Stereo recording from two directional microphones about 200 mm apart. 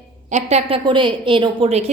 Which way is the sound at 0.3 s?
35° right (ahead or behind).